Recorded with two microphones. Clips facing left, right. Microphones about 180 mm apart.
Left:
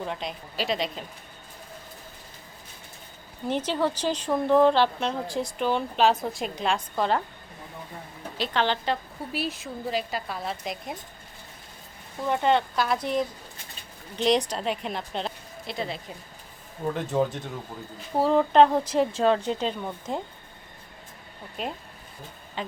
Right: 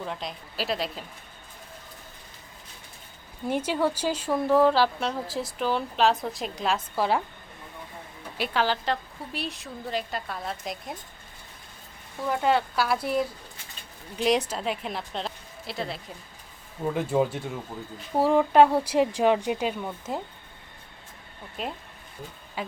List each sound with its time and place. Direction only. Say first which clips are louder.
0.0 s speech: left 2 dB; centre (ahead or behind)
3.4 s speech: even; 10° right (ahead or behind)
8.4 s speech: even; 5° right (ahead or behind)
12.3 s a woman's voice: left 1 dB; 5° right (ahead or behind)
21.5 s speech: left 1 dB; centre (ahead or behind)